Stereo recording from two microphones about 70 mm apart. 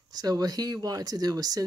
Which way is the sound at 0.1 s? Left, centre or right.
Right.